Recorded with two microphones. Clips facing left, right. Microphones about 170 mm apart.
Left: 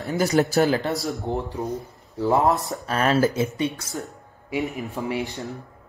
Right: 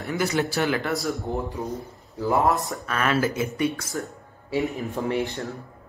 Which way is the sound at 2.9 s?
35° left (ahead or behind).